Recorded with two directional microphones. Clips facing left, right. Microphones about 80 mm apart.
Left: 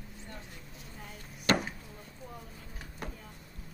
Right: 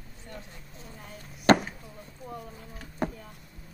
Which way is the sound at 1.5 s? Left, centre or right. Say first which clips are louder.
Right 8 dB; right.